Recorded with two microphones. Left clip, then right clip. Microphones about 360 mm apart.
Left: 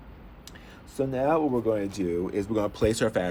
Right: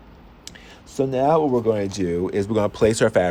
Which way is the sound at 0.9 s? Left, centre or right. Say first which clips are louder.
Right 6 dB; right.